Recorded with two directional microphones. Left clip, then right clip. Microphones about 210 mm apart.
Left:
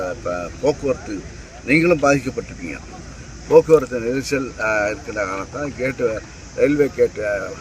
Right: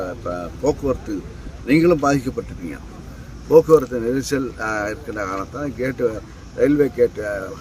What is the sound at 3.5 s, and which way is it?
Speech, 25° right (ahead or behind).